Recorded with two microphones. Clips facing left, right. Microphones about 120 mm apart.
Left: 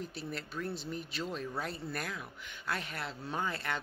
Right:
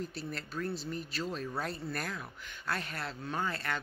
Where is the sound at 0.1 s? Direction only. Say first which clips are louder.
Right 1 dB; 15° left (ahead or behind).